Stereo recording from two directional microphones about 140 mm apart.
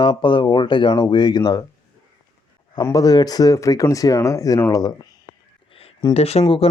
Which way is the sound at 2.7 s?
25° left (ahead or behind).